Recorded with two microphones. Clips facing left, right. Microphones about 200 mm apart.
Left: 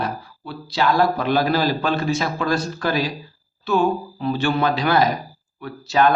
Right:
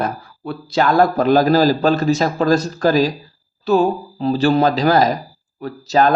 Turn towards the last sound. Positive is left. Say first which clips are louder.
# right 2 dB
turn(degrees=-40)  # may be behind; listen again after turning